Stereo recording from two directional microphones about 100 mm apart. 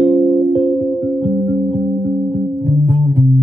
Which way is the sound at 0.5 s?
55° left (ahead or behind).